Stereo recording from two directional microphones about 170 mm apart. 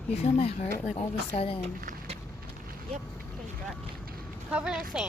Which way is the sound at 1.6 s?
40° right (ahead or behind).